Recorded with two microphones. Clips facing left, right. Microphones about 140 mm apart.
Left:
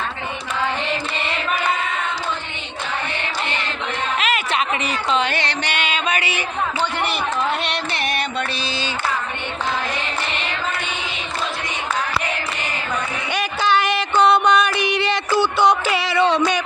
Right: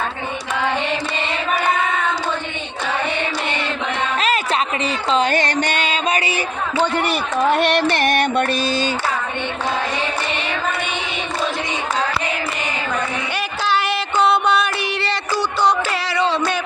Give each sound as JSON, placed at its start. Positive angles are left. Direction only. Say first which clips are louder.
{"t": 4.9, "sound": "music", "louder": "right 6 dB", "side_deg": -35}
{"t": 7.5, "sound": "music", "louder": "right 8 dB", "side_deg": -50}
{"t": 13.3, "sound": "a sound", "louder": "left 3 dB", "side_deg": -5}